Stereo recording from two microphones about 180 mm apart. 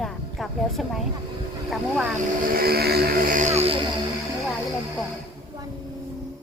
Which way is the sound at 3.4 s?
40° right (ahead or behind).